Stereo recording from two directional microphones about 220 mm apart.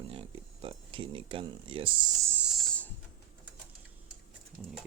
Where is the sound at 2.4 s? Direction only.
Centre (ahead or behind).